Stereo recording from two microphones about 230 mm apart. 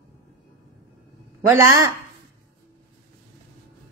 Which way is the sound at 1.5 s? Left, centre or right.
Centre.